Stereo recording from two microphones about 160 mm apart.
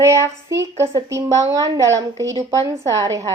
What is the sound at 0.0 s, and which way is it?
A woman's voice, 15° right (ahead or behind).